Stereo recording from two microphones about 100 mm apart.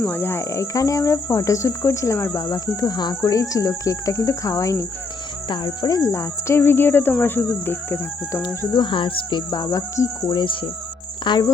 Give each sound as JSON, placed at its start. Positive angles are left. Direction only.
{"t": 0.0, "sound": "speech", "side_deg": 20}
{"t": 5.5, "sound": "speech", "side_deg": 45}
{"t": 6.1, "sound": "speech", "side_deg": 25}
{"t": 8.7, "sound": "speech", "side_deg": 50}
{"t": 9.5, "sound": "speech", "side_deg": 35}
{"t": 10.3, "sound": "speech", "side_deg": 55}